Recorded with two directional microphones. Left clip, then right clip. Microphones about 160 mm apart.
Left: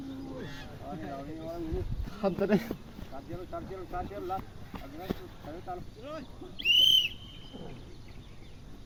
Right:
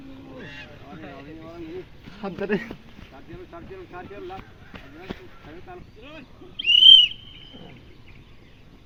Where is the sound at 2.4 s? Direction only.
85° left.